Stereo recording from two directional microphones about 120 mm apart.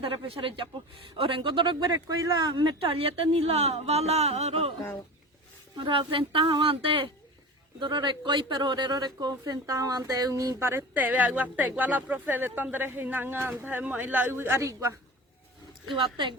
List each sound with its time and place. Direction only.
0.0 s a woman's voice: 50° right (ahead or behind); by 2.6 s 30° right (ahead or behind)
2.6 s speech: 45° right (ahead or behind)
5.7 s a woman's voice: 40° right (ahead or behind)
16.0 s a man's voice: 40° right (ahead or behind)